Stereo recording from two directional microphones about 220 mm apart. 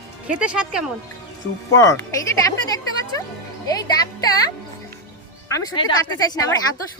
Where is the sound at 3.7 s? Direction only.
15° left (ahead or behind).